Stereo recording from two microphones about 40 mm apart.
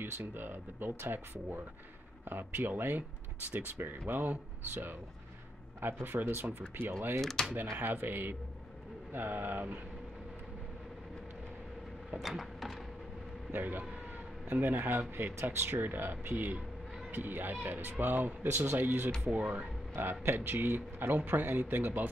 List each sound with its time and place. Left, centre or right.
0.0 s speech: right
5.8 s speech: right
7.4 s speech: centre
7.7 s speech: right
12.2 s a sound: centre
13.5 s speech: right
16.3 s speech: right
17.1 s speech: right